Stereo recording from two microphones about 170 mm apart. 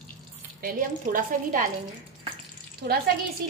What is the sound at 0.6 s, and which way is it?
A woman's voice, 55° right (ahead or behind).